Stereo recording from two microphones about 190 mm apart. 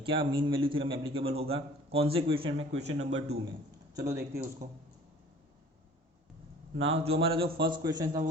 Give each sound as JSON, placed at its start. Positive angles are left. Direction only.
{"t": 0.0, "sound": "a man's voice", "side_deg": -25}
{"t": 3.9, "sound": "speech", "side_deg": -15}
{"t": 6.7, "sound": "a man's voice", "side_deg": -30}